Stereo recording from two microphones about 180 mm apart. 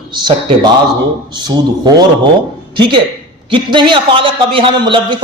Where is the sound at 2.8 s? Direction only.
25° right (ahead or behind).